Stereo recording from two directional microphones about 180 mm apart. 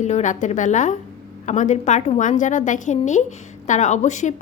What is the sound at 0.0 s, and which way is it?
A woman's voice, 40° left (ahead or behind).